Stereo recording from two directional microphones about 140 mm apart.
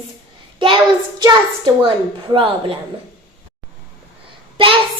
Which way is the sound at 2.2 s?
40° right (ahead or behind).